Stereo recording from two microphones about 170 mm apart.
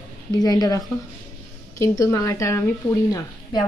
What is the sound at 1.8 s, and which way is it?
A woman's voice, 15° left (ahead or behind).